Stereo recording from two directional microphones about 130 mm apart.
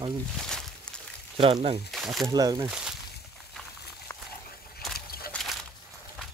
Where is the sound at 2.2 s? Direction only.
25° right (ahead or behind).